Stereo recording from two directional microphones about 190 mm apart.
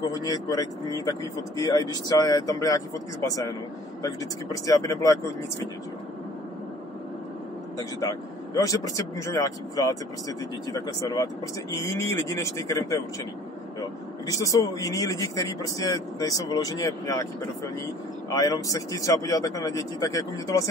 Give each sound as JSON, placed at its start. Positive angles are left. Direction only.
{"t": 0.0, "sound": "a man's voice", "side_deg": 20}
{"t": 7.7, "sound": "a man's voice", "side_deg": 20}
{"t": 18.3, "sound": "a man's voice", "side_deg": 20}